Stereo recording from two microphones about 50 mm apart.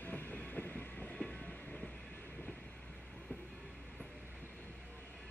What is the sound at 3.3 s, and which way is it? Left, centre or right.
Train, left.